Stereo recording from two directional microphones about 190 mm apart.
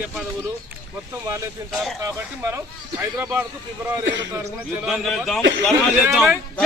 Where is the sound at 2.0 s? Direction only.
15° right (ahead or behind).